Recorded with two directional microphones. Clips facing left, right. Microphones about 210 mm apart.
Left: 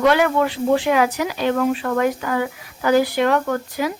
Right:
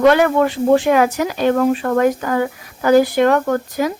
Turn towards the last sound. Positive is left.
turn(degrees=-45)  # may be behind; listen again after turning